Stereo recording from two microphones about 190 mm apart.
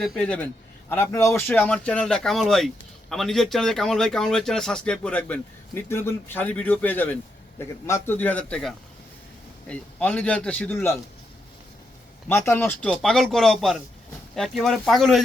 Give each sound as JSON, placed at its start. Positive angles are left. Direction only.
{"t": 0.0, "sound": "a man's voice", "side_deg": 5}
{"t": 12.3, "sound": "speech", "side_deg": 10}